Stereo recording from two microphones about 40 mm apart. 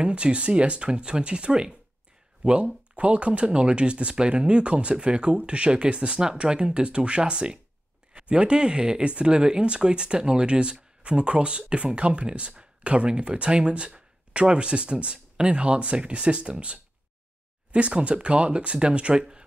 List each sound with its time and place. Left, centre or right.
0.0 s speech: right